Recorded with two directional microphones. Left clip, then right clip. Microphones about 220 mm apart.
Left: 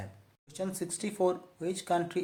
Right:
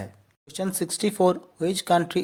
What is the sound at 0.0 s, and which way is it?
Speech, 40° right (ahead or behind).